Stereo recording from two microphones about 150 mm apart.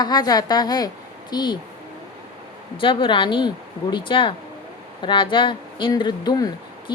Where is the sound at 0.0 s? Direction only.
25° left (ahead or behind).